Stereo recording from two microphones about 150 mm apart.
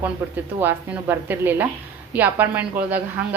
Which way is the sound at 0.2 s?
15° right (ahead or behind).